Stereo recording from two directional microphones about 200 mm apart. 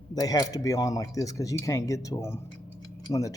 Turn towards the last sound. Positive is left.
turn(degrees=15)  # may be behind; listen again after turning